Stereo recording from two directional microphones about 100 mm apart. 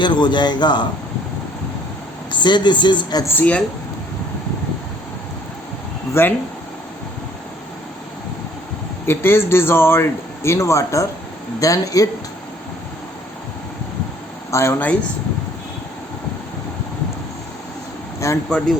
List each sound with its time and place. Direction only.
0.0 s speech: 50° left (ahead or behind)
2.3 s speech: 50° left (ahead or behind)
3.2 s speech: 15° left (ahead or behind)
6.2 s speech: 25° left (ahead or behind)
9.0 s speech: 25° left (ahead or behind)
14.5 s speech: 25° left (ahead or behind)
18.2 s speech: 30° left (ahead or behind)